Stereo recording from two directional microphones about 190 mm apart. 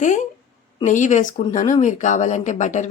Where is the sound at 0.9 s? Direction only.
40° left (ahead or behind).